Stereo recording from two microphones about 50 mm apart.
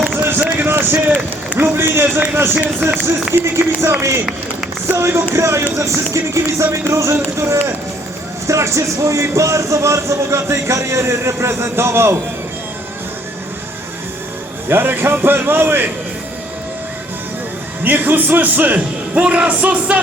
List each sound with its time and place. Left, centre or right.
0.2 s run: right
1.5 s speech: right
2.8 s speech: right
3.4 s speech: right
4.9 s speech: right
5.7 s music: right
8.4 s speech: right
14.7 s speech: right
17.8 s a man's voice: right